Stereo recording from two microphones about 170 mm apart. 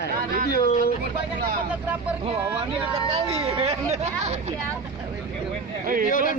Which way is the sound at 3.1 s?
35° right (ahead or behind).